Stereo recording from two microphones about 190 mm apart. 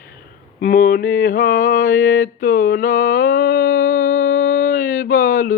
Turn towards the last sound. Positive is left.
turn(degrees=55)  # may be behind; listen again after turning